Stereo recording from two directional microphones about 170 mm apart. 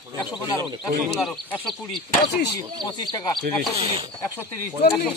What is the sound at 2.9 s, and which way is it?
Speech, 25° left (ahead or behind).